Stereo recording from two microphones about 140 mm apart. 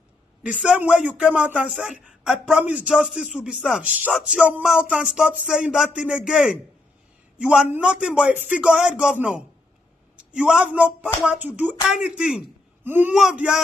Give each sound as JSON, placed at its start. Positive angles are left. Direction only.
{"t": 0.4, "sound": "a man's voice", "side_deg": -10}
{"t": 13.1, "sound": "a man's voice", "side_deg": -5}